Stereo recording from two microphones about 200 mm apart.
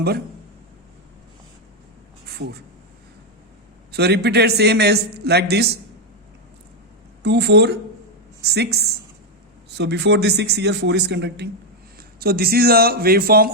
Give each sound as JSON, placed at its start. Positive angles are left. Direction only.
{"t": 2.2, "sound": "a sound", "side_deg": -55}
{"t": 3.9, "sound": "a man's voice", "side_deg": -55}
{"t": 7.2, "sound": "a man's voice", "side_deg": -55}